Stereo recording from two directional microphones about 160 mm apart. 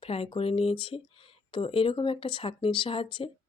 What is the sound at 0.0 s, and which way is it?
A woman's voice, 35° left (ahead or behind).